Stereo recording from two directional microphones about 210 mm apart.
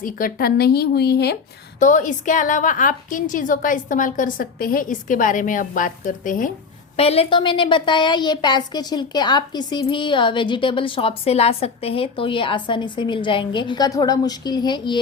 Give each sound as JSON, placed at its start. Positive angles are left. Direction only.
{"t": 0.0, "sound": "speech", "side_deg": 40}
{"t": 1.8, "sound": "a woman's voice", "side_deg": 35}
{"t": 6.9, "sound": "a woman's voice", "side_deg": 30}